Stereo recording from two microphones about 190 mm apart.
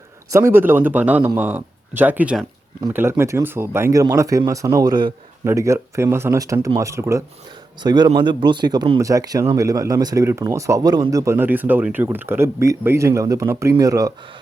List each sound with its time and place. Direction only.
0.3 s speech: 10° right (ahead or behind)